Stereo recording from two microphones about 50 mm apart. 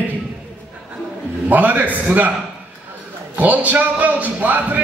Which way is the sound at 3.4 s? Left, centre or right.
Right.